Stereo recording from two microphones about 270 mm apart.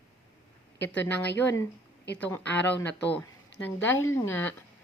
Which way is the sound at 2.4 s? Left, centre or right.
Left.